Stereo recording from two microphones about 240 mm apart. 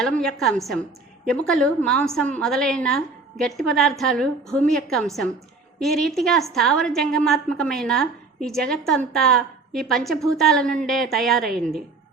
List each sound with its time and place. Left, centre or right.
0.0 s a woman's voice: centre